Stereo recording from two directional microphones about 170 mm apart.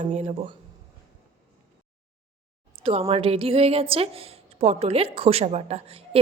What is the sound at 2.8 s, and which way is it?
A woman's voice, 35° right (ahead or behind).